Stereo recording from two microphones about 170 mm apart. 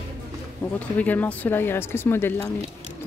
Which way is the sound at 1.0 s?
10° left (ahead or behind).